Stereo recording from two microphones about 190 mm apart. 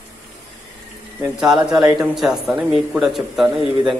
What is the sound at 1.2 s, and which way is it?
A man's voice, 5° right (ahead or behind).